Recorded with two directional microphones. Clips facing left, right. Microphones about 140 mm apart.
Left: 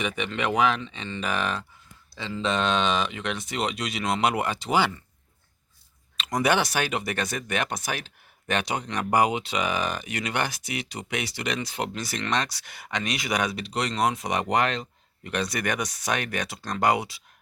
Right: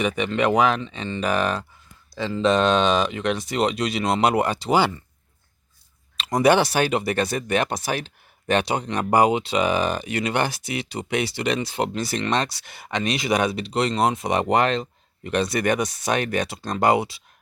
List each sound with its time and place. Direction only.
0.0 s speech: 40° right (ahead or behind)
6.1 s speech: 30° right (ahead or behind)